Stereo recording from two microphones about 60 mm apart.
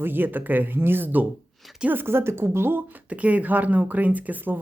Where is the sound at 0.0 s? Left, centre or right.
Right.